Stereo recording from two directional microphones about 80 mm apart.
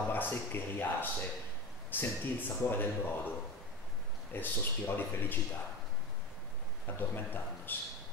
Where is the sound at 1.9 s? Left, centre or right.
Left.